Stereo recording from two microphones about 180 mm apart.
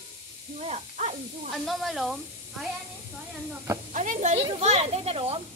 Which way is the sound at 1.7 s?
Centre (ahead or behind).